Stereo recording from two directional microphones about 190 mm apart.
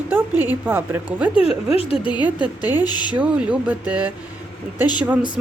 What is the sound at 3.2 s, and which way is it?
Speech, 5° right (ahead or behind).